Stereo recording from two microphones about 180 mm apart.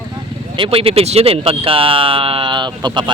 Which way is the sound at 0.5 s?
30° right (ahead or behind).